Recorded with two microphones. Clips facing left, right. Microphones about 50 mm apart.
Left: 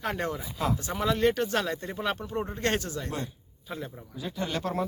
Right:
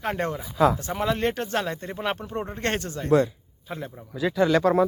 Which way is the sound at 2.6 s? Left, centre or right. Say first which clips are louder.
Right 1 dB; right.